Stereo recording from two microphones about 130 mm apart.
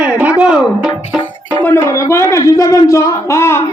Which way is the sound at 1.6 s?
20° left (ahead or behind).